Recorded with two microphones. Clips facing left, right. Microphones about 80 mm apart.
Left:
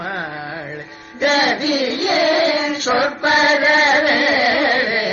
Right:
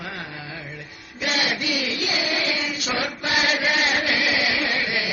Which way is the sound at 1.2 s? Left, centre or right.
Left.